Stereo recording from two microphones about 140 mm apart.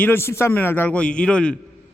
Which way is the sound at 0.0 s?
15° left (ahead or behind).